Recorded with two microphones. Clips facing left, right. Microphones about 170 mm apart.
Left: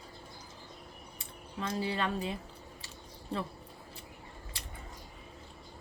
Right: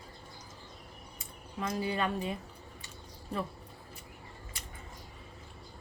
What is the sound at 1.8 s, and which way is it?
Speech, 30° left (ahead or behind).